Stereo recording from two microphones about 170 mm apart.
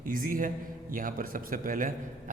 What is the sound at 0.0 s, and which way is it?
A man's voice, 55° right (ahead or behind).